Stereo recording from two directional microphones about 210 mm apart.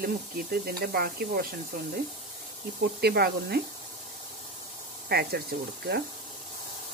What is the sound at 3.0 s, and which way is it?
Speech, 50° right (ahead or behind).